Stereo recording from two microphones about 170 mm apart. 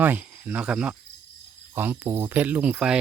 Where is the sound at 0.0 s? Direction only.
10° right (ahead or behind).